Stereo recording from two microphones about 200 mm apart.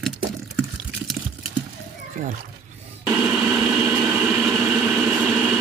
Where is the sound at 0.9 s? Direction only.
5° right (ahead or behind).